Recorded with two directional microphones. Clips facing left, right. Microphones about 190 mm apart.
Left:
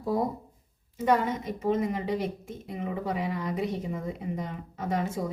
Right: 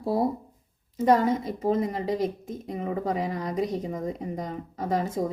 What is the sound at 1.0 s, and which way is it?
A woman's voice, 35° right (ahead or behind).